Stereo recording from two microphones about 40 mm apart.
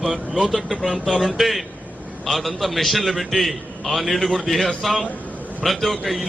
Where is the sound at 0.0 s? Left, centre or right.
Centre.